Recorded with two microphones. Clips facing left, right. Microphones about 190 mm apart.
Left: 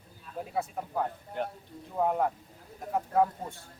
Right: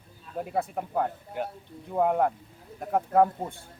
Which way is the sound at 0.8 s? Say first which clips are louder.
Right 4 dB; 60° right (ahead or behind).